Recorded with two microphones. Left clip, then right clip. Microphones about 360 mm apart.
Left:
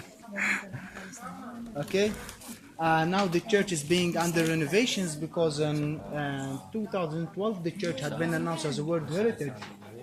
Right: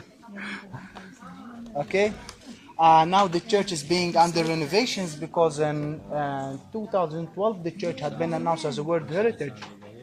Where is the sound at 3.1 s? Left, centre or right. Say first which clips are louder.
Right 5 dB; centre.